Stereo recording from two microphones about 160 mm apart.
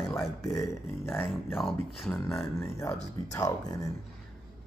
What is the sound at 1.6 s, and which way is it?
Speech, centre (ahead or behind).